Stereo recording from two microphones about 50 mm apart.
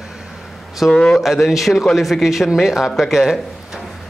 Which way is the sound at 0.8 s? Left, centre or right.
Centre.